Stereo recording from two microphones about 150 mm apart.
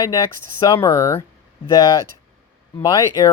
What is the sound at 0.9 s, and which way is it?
Speech, 15° left (ahead or behind).